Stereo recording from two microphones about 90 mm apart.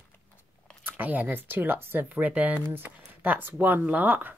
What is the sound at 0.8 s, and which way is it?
Speech, 20° right (ahead or behind).